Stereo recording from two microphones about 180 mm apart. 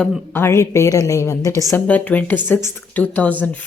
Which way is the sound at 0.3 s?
15° left (ahead or behind).